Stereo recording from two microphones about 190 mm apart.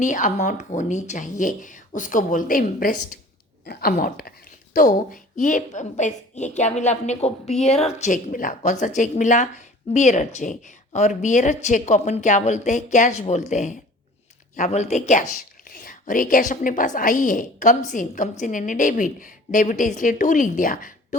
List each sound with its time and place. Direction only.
0.0 s speech: 40° left (ahead or behind)